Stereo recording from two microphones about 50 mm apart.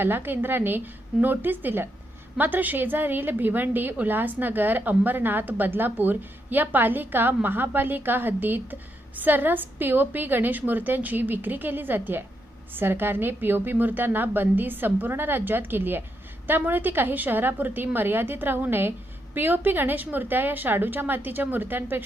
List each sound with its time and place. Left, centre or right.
0.0 s a woman's voice: right